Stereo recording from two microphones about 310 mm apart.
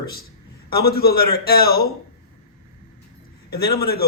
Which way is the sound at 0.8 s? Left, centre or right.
Left.